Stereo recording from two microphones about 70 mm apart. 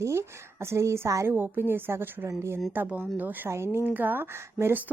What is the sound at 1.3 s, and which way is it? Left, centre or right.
Speech, right.